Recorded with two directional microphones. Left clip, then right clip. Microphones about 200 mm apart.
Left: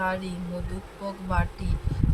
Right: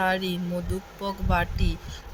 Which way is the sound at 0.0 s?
35° right (ahead or behind).